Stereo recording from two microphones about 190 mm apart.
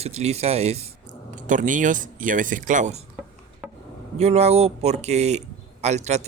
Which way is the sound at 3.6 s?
5° right (ahead or behind).